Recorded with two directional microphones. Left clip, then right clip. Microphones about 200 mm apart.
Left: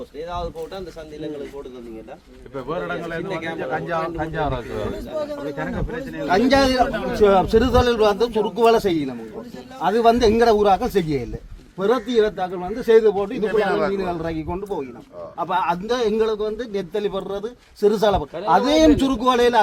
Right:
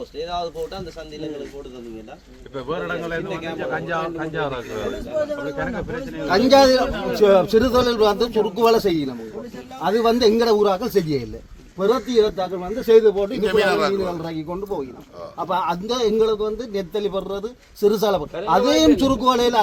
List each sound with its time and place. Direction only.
2.6 s a man's voice: 60° left (ahead or behind)
6.2 s a man's voice: 25° right (ahead or behind)
11.9 s a man's voice: centre (ahead or behind)
12.4 s a man's voice: 25° right (ahead or behind)